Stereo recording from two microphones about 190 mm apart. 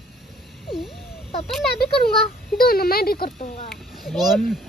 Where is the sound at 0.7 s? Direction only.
Centre (ahead or behind).